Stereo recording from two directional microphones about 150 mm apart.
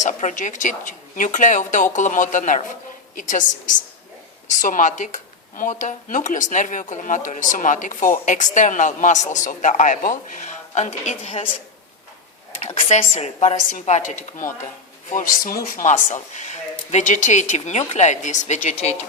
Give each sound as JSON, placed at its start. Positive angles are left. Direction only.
{"t": 0.0, "sound": "speech", "side_deg": 55}
{"t": 12.6, "sound": "speech", "side_deg": 50}
{"t": 15.1, "sound": "speech", "side_deg": 65}